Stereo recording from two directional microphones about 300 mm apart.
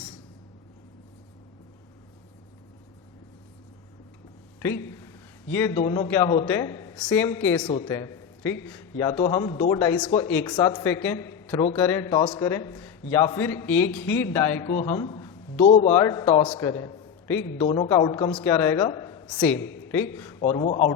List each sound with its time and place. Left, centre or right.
4.6 s a man's voice: centre
7.9 s a sound: centre
8.6 s a man's voice: centre